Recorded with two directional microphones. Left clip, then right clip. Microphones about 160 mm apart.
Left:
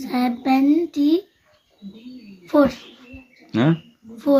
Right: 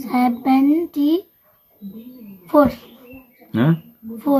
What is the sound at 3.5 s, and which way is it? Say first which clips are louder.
Speech: even; 20° left (ahead or behind).